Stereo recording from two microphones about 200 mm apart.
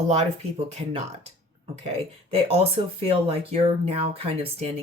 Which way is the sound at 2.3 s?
30° right (ahead or behind).